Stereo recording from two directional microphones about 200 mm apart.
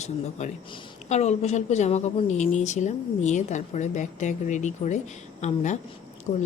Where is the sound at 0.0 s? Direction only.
35° left (ahead or behind).